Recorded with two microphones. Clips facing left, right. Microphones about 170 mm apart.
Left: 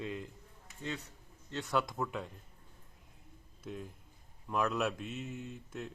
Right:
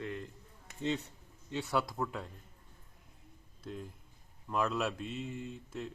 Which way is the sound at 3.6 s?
5° left (ahead or behind).